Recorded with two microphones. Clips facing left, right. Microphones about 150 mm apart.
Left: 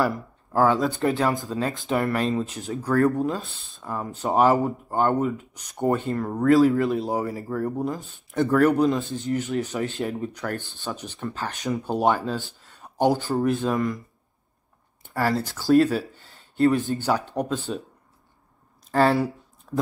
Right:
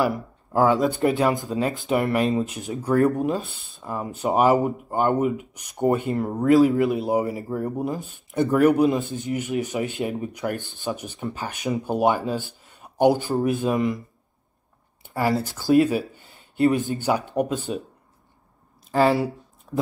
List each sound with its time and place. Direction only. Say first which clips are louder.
0.1 s speech: right 2 dB; 15° right (ahead or behind)
15.8 s speech: right 1 dB; 15° right (ahead or behind)
18.9 s a sound: right 1 dB; 5° right (ahead or behind)